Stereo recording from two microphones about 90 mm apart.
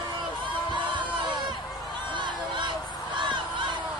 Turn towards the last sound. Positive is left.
turn(degrees=-60)  # may be behind; listen again after turning